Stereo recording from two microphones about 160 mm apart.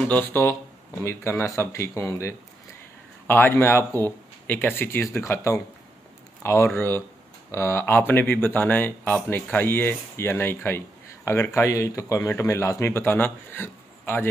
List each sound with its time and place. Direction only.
0.1 s speech: 15° left (ahead or behind)